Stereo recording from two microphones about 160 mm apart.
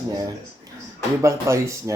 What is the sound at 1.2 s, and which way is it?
Speech, 20° right (ahead or behind).